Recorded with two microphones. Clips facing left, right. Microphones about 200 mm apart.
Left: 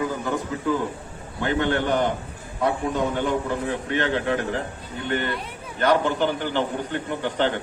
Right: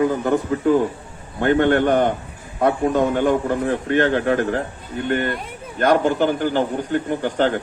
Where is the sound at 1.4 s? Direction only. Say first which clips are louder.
Right 7 dB; 55° right (ahead or behind).